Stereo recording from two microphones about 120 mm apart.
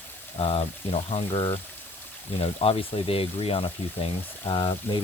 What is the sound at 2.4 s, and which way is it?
Speech, 50° left (ahead or behind).